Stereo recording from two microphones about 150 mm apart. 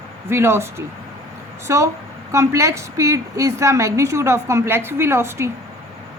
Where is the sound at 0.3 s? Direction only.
15° right (ahead or behind).